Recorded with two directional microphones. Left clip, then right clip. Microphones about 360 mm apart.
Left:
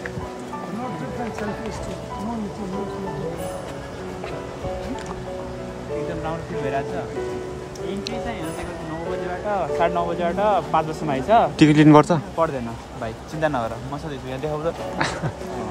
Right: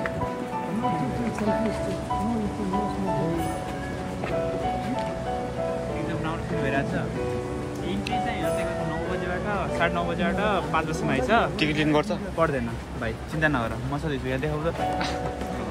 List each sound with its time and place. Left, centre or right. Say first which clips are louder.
6.2 s music: left 2 dB; left
9.5 s speech: left 6 dB; left